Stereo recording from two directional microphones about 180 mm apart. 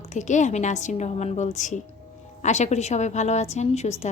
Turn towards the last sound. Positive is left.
turn(degrees=35)  # may be behind; listen again after turning